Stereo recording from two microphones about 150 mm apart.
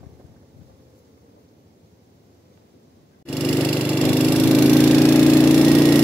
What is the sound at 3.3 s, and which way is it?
Lawn mower, 10° left (ahead or behind).